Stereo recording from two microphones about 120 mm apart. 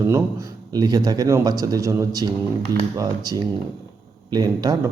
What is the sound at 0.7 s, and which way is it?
Speech, 30° right (ahead or behind).